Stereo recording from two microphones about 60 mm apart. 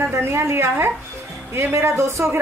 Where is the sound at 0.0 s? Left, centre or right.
Right.